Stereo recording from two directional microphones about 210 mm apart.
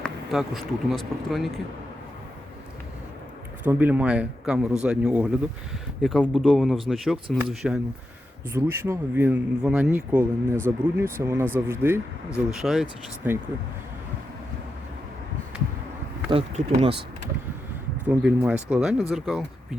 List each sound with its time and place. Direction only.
0.0 s speech: centre (ahead or behind)
3.7 s speech: 10° right (ahead or behind)
16.3 s speech: 25° right (ahead or behind)
18.1 s speech: 5° right (ahead or behind)